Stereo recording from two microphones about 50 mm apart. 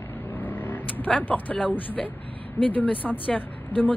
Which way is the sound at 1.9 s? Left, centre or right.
Left.